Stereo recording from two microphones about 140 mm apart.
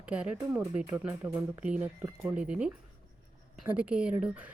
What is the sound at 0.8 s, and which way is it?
A woman's voice, 20° right (ahead or behind).